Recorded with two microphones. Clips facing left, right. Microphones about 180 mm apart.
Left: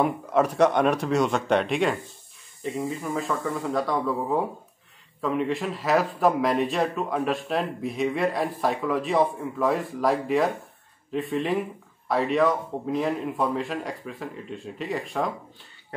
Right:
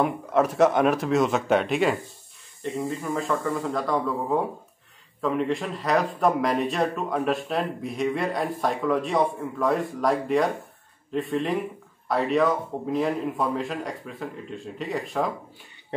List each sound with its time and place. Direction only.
0.0 s a man's voice: centre (ahead or behind)